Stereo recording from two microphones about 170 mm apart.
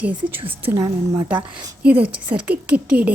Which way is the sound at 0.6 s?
15° right (ahead or behind).